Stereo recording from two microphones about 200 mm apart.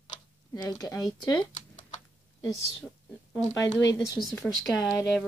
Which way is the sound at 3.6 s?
20° left (ahead or behind).